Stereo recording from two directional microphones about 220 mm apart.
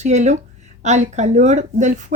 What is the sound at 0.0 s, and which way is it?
Speech, 30° right (ahead or behind).